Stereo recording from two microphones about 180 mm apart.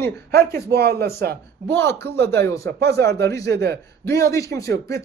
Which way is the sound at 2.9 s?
15° left (ahead or behind).